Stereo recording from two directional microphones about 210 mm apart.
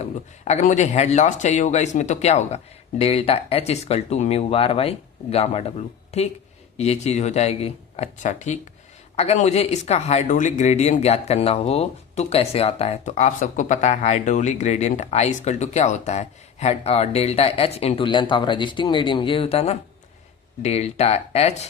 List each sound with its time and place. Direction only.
0.0 s speech: 35° left (ahead or behind)